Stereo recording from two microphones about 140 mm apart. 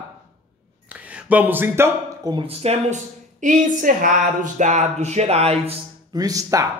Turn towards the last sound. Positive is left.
turn(degrees=-25)  # may be behind; listen again after turning